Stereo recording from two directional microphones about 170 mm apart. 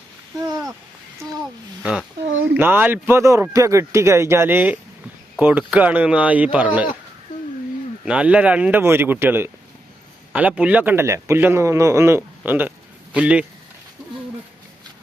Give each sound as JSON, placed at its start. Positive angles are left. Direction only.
{"t": 0.4, "sound": "a sound", "side_deg": -20}
{"t": 1.8, "sound": "a man's voice", "side_deg": -5}
{"t": 8.0, "sound": "a man's voice", "side_deg": -5}